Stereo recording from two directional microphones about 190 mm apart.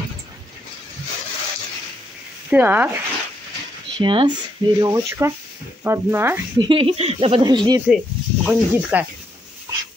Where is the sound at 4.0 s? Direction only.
25° right (ahead or behind).